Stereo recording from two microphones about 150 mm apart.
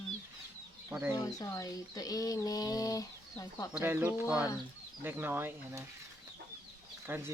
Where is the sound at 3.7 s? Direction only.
10° right (ahead or behind).